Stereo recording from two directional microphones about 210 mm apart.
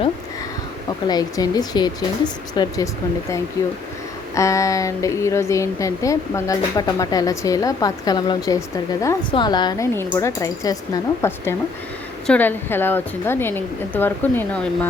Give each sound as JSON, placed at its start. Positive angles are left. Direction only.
{"t": 1.0, "sound": "speech", "side_deg": 20}